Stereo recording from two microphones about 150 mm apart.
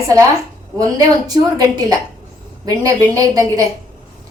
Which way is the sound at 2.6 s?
20° right (ahead or behind).